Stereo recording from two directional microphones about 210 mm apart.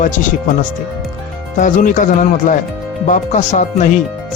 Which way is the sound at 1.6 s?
40° left (ahead or behind).